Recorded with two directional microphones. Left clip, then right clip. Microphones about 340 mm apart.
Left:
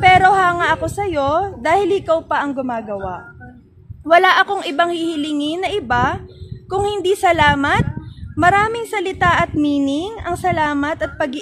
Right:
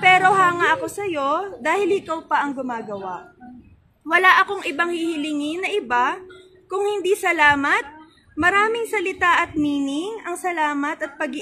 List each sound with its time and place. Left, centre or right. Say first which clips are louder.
0.0 s a woman's voice: left 4 dB; left
4.2 s a woman's voice: left 2 dB; left